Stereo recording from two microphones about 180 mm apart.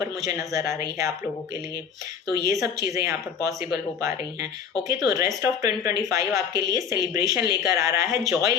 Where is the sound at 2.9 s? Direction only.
20° right (ahead or behind).